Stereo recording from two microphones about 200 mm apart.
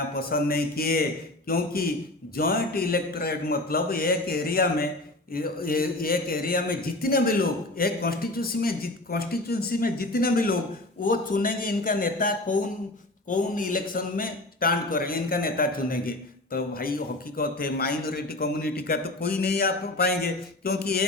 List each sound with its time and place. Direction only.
0.1 s speech: 50° left (ahead or behind)